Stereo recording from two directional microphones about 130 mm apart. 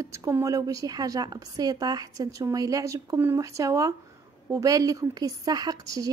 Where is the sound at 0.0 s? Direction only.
25° right (ahead or behind).